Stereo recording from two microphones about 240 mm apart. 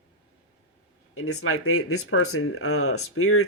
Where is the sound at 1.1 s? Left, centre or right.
Left.